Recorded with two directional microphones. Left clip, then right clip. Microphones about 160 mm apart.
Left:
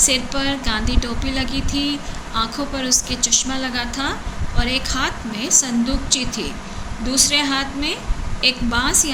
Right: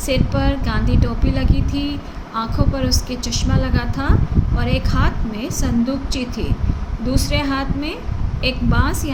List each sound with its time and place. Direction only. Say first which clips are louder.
0.0 s speech: left 1 dB; 50° right (ahead or behind)